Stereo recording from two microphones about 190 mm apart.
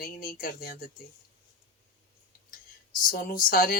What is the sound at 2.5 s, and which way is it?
Speech, 45° left (ahead or behind).